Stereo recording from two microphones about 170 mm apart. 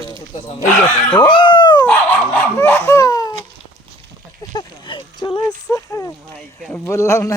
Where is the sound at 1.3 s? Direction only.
30° left (ahead or behind).